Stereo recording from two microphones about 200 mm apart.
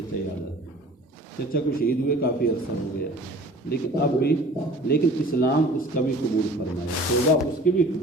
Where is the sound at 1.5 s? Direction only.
45° left (ahead or behind).